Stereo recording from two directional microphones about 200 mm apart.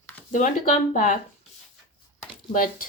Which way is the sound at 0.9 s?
40° left (ahead or behind).